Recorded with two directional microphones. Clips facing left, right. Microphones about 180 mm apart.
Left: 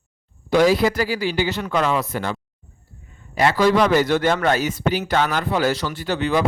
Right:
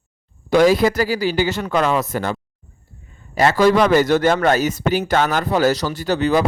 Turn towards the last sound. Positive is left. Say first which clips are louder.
# right 3 dB
turn(degrees=-40)  # may be behind; listen again after turning